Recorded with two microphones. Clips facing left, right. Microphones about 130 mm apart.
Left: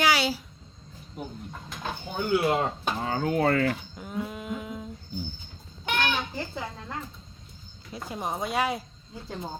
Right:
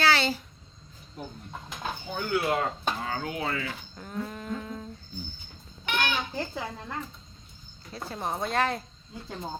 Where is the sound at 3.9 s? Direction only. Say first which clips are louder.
Left 2 dB; 10° left (ahead or behind).